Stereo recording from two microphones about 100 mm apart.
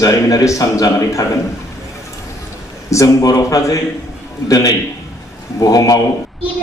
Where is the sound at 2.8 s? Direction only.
35° left (ahead or behind).